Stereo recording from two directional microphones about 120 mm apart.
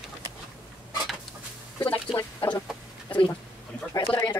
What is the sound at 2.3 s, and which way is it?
Speech, 40° left (ahead or behind).